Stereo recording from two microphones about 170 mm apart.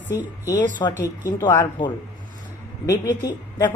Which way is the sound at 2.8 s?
20° left (ahead or behind).